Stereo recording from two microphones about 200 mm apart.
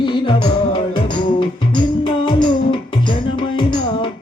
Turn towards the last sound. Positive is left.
turn(degrees=25)  # may be behind; listen again after turning